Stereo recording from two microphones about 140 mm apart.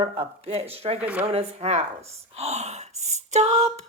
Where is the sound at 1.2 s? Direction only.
50° right (ahead or behind).